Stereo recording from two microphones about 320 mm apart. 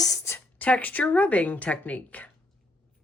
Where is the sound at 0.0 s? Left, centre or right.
Centre.